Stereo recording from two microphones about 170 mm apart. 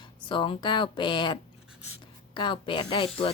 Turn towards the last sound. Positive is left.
turn(degrees=35)  # may be behind; listen again after turning